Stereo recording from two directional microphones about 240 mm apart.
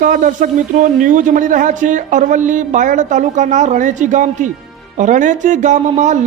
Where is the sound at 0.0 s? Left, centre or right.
Right.